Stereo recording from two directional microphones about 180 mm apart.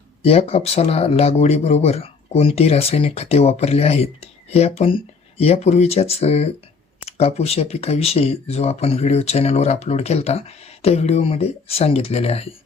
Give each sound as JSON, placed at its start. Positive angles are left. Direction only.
{"t": 0.2, "sound": "speech", "side_deg": 35}